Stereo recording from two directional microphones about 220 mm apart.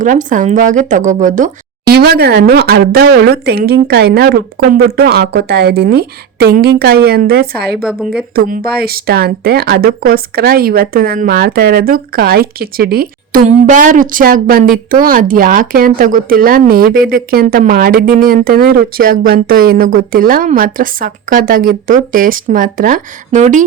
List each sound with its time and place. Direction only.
0.0 s speech: 35° right (ahead or behind)
1.9 s speech: 45° right (ahead or behind)
7.8 s a woman's voice: 5° right (ahead or behind)
8.4 s speech: 40° right (ahead or behind)